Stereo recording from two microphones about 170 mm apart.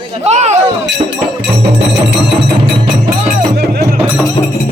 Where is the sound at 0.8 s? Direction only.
90° right.